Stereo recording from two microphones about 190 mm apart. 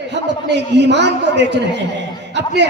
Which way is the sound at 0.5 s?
65° right (ahead or behind).